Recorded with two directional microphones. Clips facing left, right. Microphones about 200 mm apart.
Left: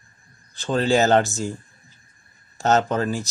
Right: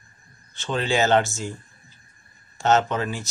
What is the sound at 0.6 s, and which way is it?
Speech, 40° left (ahead or behind).